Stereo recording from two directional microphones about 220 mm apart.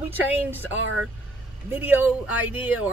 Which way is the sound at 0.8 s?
65° right (ahead or behind).